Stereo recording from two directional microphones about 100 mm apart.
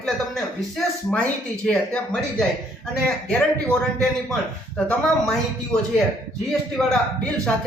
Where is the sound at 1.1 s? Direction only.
10° left (ahead or behind).